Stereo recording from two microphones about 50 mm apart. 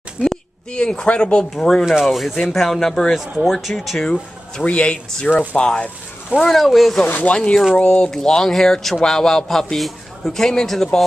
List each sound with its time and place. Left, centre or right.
0.7 s a man's voice: centre
1.5 s speech: centre
4.0 s speech: centre
6.4 s speech: centre
7.1 s speech: left
7.3 s a man's voice: centre
8.1 s a man's voice: centre